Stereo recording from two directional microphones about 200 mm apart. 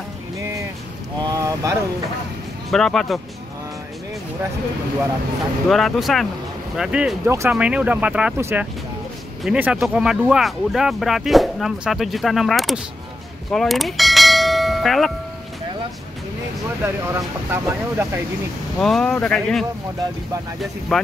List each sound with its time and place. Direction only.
0.4 s music: 15° right (ahead or behind)
1.2 s vehicle: 15° right (ahead or behind)
2.7 s speech: centre (ahead or behind)
5.7 s speech: centre (ahead or behind)
13.5 s bell: centre (ahead or behind)
16.8 s speech: 10° right (ahead or behind)
18.8 s speech: centre (ahead or behind)
20.9 s speech: centre (ahead or behind)